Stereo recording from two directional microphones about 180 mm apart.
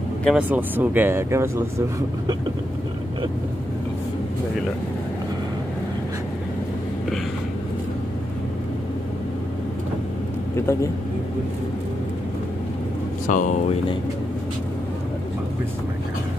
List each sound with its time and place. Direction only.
0.2 s speech: 5° right (ahead or behind)
10.5 s speech: 15° left (ahead or behind)
13.3 s speech: 45° left (ahead or behind)